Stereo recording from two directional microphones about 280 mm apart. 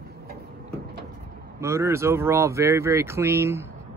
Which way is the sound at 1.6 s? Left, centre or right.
Centre.